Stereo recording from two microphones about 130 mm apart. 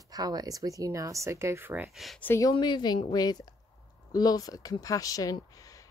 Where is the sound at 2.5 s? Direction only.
35° left (ahead or behind).